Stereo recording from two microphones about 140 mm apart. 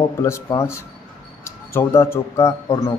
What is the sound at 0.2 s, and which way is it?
Speech, 20° left (ahead or behind).